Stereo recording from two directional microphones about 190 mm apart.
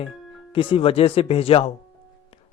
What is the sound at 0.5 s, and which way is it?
Speech, 25° left (ahead or behind).